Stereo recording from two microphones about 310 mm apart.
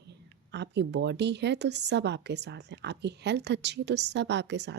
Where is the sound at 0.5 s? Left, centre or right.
Right.